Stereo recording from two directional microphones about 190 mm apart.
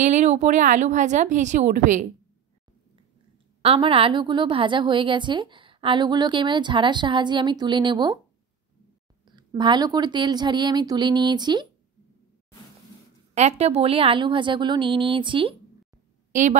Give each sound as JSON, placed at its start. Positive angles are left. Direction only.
{"t": 0.0, "sound": "a woman's voice", "side_deg": -35}
{"t": 3.6, "sound": "a woman's voice", "side_deg": -30}
{"t": 9.2, "sound": "a woman's voice", "side_deg": -25}
{"t": 13.3, "sound": "a woman's voice", "side_deg": -35}
{"t": 16.3, "sound": "a sound", "side_deg": -40}